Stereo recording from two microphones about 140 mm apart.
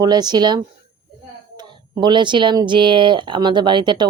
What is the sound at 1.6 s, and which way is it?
A woman's voice, 35° right (ahead or behind).